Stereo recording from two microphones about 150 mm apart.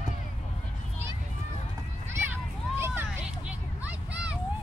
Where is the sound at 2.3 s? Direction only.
15° right (ahead or behind).